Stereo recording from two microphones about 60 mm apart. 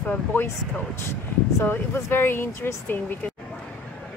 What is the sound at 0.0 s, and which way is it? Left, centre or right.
Speech, left.